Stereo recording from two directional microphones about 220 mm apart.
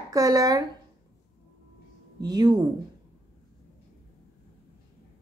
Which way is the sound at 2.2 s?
20° right (ahead or behind).